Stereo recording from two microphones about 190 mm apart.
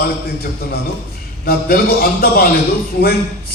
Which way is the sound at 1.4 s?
55° left (ahead or behind).